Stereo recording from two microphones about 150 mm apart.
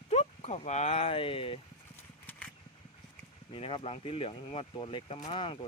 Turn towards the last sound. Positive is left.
turn(degrees=35)  # may be behind; listen again after turning